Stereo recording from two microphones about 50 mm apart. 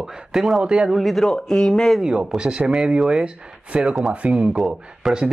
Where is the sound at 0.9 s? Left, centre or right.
Centre.